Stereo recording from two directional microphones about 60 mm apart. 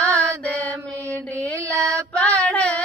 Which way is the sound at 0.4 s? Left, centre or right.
Left.